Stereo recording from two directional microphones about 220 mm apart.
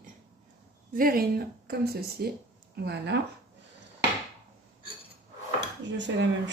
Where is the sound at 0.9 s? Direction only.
40° right (ahead or behind).